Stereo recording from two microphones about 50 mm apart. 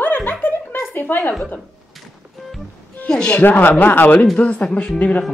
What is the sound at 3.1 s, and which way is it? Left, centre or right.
Speech, centre.